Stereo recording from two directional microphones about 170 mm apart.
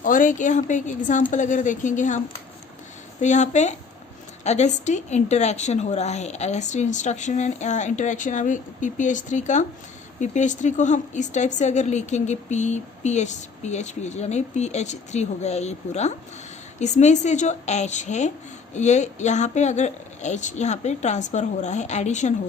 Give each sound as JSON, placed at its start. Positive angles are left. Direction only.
{"t": 0.0, "sound": "speech", "side_deg": 50}